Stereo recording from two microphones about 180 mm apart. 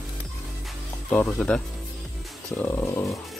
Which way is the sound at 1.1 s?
5° left (ahead or behind).